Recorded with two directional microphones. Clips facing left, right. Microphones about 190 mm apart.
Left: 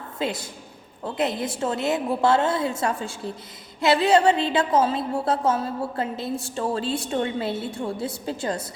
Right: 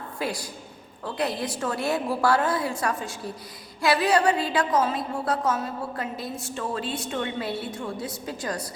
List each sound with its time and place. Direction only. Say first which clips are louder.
0.2 s a woman's voice: left 3 dB; 25° left (ahead or behind)